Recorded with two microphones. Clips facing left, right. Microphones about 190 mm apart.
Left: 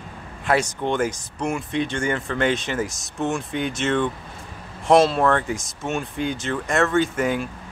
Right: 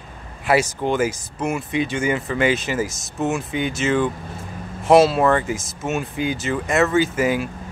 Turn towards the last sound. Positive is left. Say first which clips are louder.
# right 2 dB
turn(degrees=-5)  # may be behind; listen again after turning